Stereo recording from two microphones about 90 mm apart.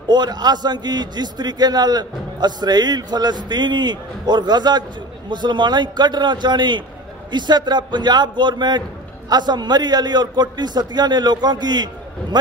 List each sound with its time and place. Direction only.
0.1 s a man's voice: 50° right (ahead or behind)